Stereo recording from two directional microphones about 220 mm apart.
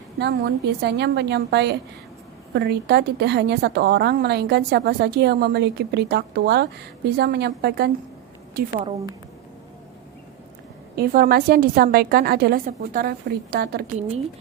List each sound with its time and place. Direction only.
0.2 s a woman's voice: 50° right (ahead or behind)
10.9 s a woman's voice: 40° right (ahead or behind)